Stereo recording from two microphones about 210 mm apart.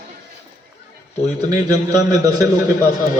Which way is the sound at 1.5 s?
15° right (ahead or behind).